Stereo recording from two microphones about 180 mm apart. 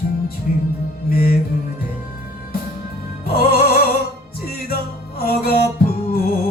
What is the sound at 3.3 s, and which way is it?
Music, 55° left (ahead or behind).